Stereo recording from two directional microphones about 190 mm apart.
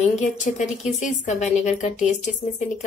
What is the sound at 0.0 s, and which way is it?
A woman's voice, 40° left (ahead or behind).